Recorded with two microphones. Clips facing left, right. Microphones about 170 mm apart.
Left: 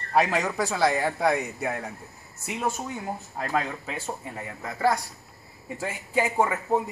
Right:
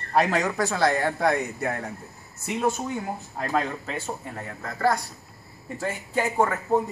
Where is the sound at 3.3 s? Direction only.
5° left (ahead or behind).